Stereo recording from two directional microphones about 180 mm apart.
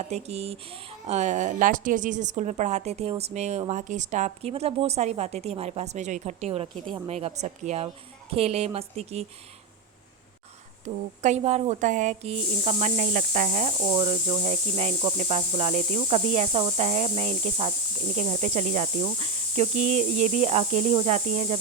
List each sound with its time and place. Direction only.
0.0 s speech: 35° right (ahead or behind)
10.8 s speech: 40° right (ahead or behind)
13.9 s speech: 25° right (ahead or behind)